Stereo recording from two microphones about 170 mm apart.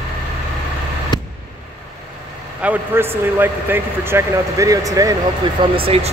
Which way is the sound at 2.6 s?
10° right (ahead or behind).